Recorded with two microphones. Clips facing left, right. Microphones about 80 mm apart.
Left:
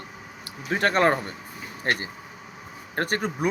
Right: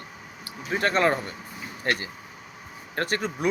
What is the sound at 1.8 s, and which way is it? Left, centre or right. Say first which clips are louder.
Speech: left 1 dB; left.